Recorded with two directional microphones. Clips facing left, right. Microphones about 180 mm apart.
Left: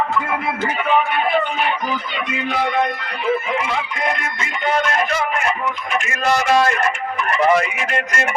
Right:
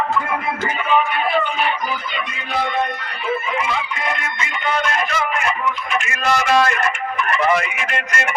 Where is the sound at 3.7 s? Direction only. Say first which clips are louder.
Left 1 dB; 50° left (ahead or behind).